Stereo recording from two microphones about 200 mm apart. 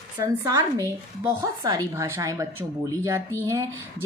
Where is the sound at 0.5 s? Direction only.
15° right (ahead or behind).